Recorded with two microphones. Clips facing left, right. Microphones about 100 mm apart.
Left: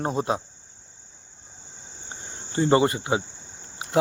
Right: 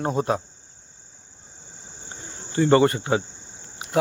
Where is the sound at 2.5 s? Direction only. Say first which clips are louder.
Right 2 dB; 25° left (ahead or behind).